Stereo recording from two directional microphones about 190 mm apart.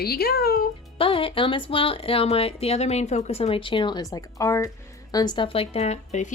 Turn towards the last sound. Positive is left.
turn(degrees=35)  # may be behind; listen again after turning